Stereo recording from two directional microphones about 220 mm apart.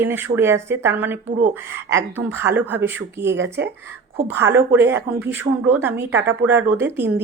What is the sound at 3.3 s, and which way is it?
Speech, 55° right (ahead or behind).